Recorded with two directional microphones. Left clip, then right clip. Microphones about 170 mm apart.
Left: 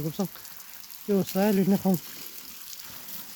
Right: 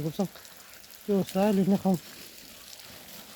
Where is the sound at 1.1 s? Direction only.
25° left (ahead or behind).